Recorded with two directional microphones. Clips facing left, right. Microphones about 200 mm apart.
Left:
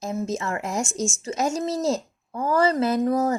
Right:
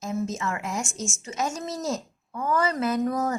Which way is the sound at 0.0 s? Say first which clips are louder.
Left 2 dB; 35° left (ahead or behind).